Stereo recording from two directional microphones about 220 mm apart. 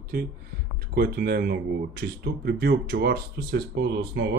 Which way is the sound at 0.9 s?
45° right (ahead or behind).